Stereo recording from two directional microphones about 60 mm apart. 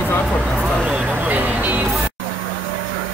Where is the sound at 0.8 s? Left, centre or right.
Right.